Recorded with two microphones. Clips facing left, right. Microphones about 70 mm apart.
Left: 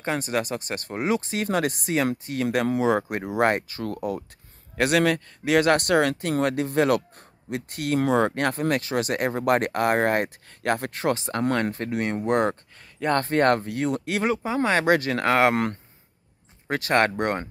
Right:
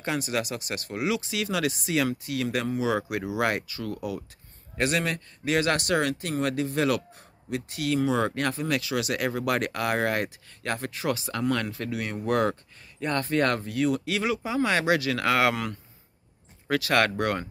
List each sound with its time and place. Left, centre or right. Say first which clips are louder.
0.0 s speech: left 3 dB; left
4.7 s speech: left 6 dB; left
11.1 s speech: left 3 dB; left
16.6 s speech: left 2 dB; left